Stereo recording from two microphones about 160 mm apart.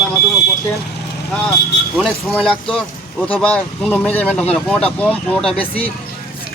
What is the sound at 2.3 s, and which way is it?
Speech, 5° left (ahead or behind).